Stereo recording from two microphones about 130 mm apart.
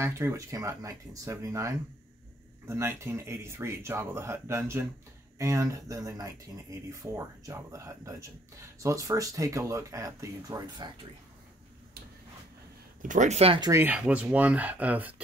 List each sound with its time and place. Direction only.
0.0 s speech: 20° right (ahead or behind)
13.0 s speech: 75° right (ahead or behind)
13.6 s speech: 25° right (ahead or behind)
13.8 s speech: 10° right (ahead or behind)